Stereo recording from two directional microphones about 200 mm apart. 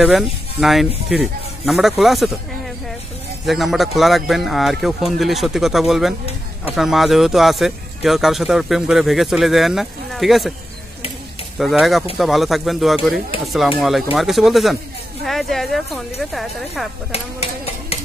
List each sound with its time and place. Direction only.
0.0 s a man's voice: centre (ahead or behind)
3.4 s a man's voice: centre (ahead or behind)
11.5 s a man's voice: centre (ahead or behind)
17.1 s stir: 30° left (ahead or behind)